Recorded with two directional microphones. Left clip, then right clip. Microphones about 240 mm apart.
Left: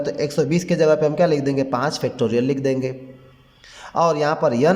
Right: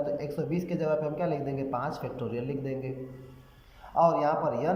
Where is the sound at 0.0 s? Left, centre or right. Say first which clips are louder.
Left 10 dB; left.